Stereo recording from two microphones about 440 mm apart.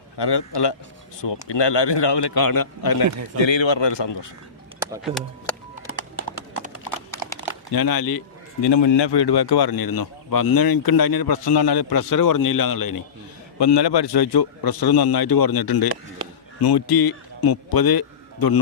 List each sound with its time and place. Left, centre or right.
0.2 s a man's voice: left
3.4 s a man's voice: left
4.8 s speech: centre
5.9 s typing: left
7.7 s a man's voice: left
8.6 s a man's voice: left
13.6 s a man's voice: left